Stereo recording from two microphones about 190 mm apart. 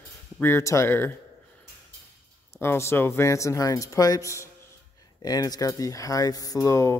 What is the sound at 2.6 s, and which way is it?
Speech, 15° left (ahead or behind).